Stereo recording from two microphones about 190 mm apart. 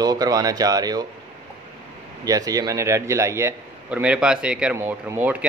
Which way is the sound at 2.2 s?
20° right (ahead or behind).